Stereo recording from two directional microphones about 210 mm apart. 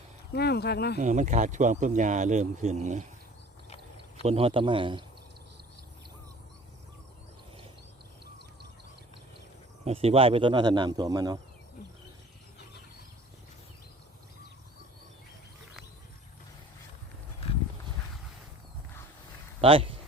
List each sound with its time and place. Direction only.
0.3 s speech: 50° left (ahead or behind)
0.9 s speech: 35° right (ahead or behind)
4.2 s speech: 25° right (ahead or behind)
9.8 s speech: 30° right (ahead or behind)
19.6 s speech: 25° right (ahead or behind)